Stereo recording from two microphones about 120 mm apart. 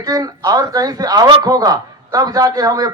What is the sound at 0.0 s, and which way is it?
Speech, 35° right (ahead or behind).